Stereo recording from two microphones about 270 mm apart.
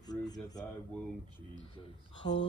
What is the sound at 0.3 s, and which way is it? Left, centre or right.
Speech, centre.